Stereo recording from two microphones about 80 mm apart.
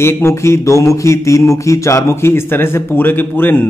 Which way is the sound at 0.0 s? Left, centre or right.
Left.